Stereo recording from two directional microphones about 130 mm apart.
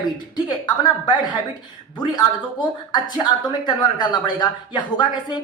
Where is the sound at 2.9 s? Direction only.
35° left (ahead or behind).